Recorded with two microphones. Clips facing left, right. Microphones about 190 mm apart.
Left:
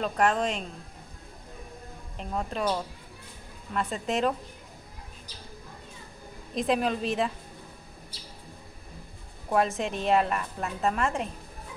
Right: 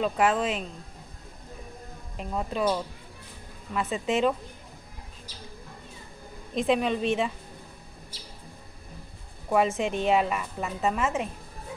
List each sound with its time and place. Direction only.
0.0 s a woman's voice: 5° right (ahead or behind)
2.1 s a woman's voice: centre (ahead or behind)
3.7 s a woman's voice: centre (ahead or behind)
6.5 s a woman's voice: centre (ahead or behind)
9.5 s a woman's voice: centre (ahead or behind)